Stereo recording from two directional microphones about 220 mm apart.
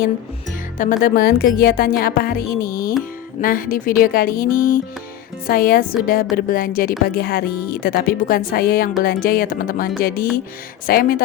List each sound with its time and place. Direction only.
0.8 s a woman's voice: 40° left (ahead or behind)